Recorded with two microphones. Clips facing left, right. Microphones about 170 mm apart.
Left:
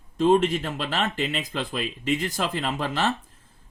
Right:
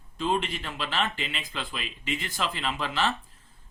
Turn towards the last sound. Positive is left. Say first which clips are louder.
# left 3 dB
turn(degrees=45)  # may be behind; listen again after turning